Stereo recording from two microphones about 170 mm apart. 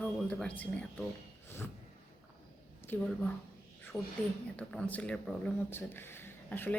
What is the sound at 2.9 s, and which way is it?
Speech, 10° left (ahead or behind).